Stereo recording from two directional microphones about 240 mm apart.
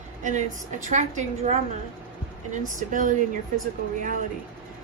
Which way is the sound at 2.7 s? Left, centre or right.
Right.